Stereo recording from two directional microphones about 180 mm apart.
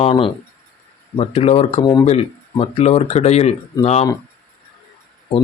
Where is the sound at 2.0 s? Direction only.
35° left (ahead or behind).